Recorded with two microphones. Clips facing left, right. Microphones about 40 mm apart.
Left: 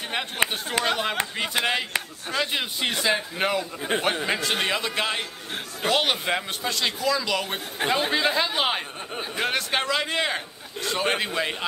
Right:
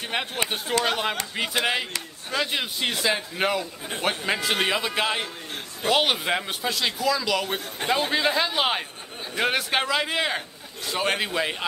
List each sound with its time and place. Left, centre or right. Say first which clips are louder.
0.1 s a man's voice: left 1 dB; centre
3.9 s a man's voice: left 4 dB; left
4.3 s a man's voice: right 1 dB; centre